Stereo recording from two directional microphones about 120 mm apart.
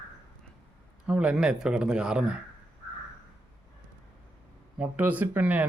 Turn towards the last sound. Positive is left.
turn(degrees=-15)  # may be behind; listen again after turning